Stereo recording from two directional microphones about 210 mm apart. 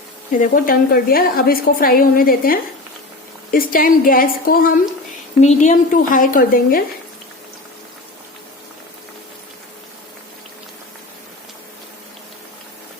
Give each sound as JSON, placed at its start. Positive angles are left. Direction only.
{"t": 0.3, "sound": "a woman's voice", "side_deg": 40}